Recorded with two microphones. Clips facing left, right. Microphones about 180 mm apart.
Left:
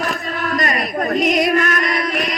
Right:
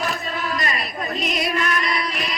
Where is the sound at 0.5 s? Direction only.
45° left (ahead or behind).